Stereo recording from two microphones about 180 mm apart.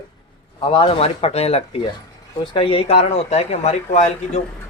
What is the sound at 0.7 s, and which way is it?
Speech, 30° left (ahead or behind).